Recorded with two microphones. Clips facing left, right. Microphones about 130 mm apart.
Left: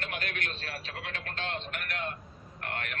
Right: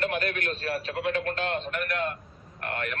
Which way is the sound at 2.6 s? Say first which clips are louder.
Right 5 dB; 80° right.